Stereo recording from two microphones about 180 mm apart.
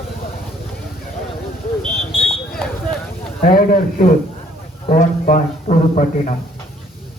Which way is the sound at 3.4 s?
50° left (ahead or behind).